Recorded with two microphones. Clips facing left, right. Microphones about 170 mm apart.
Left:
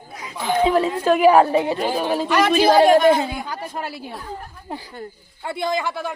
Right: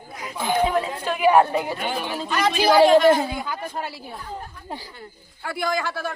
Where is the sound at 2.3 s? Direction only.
65° left (ahead or behind).